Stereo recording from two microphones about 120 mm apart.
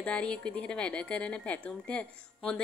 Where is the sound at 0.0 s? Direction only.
10° left (ahead or behind).